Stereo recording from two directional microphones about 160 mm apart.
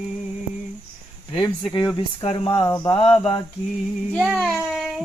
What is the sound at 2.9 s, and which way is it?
Speech, 35° left (ahead or behind).